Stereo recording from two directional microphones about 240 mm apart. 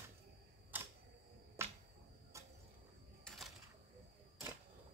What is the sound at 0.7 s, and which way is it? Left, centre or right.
Camera, centre.